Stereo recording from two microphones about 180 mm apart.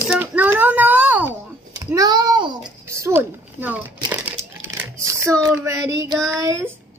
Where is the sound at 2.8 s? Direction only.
15° right (ahead or behind).